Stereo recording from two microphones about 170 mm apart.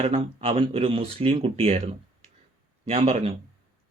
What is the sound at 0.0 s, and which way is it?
Speech, 35° right (ahead or behind).